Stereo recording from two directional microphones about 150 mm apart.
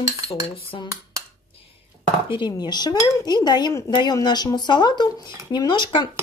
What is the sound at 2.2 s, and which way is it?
A woman's voice, 30° left (ahead or behind).